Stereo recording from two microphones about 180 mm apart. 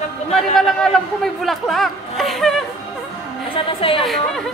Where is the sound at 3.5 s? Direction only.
30° left (ahead or behind).